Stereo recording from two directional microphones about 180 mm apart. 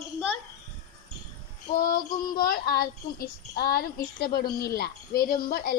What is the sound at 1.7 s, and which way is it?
Child singing, 50° left (ahead or behind).